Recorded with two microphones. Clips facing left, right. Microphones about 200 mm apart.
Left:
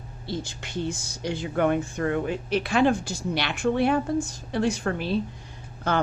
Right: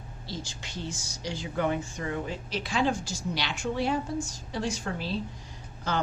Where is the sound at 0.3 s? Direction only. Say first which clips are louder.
Left 7 dB; 55° left (ahead or behind).